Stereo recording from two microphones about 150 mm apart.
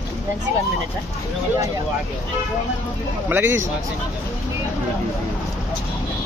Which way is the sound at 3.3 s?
15° right (ahead or behind).